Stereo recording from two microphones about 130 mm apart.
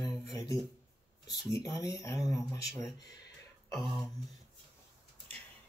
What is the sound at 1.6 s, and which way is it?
Speech, 30° left (ahead or behind).